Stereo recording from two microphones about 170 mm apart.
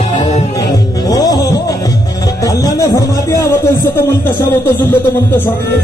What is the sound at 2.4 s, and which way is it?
Speech, 20° left (ahead or behind).